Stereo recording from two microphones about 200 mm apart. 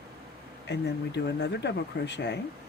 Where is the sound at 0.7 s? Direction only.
60° left (ahead or behind).